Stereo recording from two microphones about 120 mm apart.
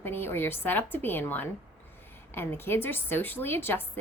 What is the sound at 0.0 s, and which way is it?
A woman's voice, 20° left (ahead or behind).